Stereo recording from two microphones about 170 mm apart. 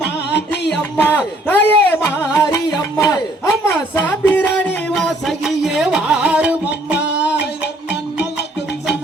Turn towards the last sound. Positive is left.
turn(degrees=85)